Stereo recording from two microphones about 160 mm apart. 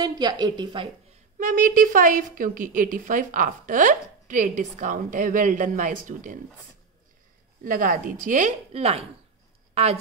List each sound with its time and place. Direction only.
0.0 s a woman's voice: 25° right (ahead or behind)
1.4 s a woman's voice: 60° right (ahead or behind)
7.6 s a woman's voice: 60° right (ahead or behind); by 9.0 s 40° right (ahead or behind)